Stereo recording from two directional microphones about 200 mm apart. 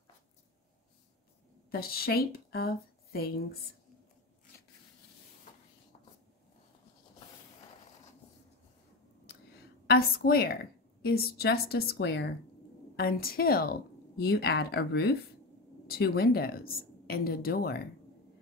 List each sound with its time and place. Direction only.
1.7 s speech: 50° left (ahead or behind)
9.8 s a woman's voice: 50° left (ahead or behind)